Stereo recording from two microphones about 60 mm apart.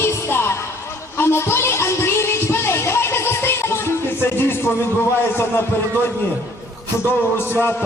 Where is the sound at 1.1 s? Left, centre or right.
Left.